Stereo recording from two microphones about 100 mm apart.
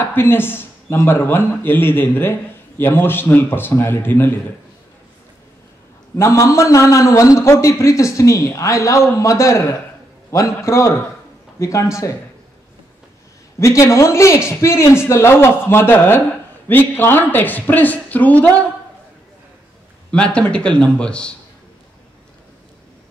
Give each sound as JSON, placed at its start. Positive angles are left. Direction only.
{"t": 0.0, "sound": "speech", "side_deg": 20}
{"t": 6.1, "sound": "a man's voice", "side_deg": 30}
{"t": 13.6, "sound": "a woman's voice", "side_deg": 30}
{"t": 20.1, "sound": "a woman's voice", "side_deg": 10}